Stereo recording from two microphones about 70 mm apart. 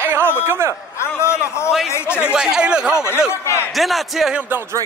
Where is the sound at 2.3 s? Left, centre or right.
Centre.